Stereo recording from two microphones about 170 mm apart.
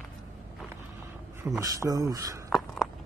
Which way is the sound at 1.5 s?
20° right (ahead or behind).